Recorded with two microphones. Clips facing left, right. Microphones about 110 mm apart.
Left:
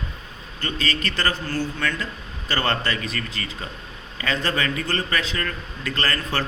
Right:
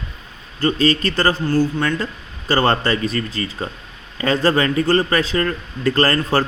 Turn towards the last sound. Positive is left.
turn(degrees=-35)  # may be behind; listen again after turning